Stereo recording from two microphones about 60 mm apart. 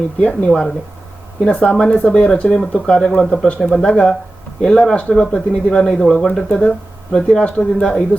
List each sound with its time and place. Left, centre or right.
0.2 s speech: left